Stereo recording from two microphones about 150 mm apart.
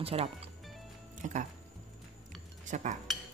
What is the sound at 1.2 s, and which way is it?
Speech, 55° right (ahead or behind).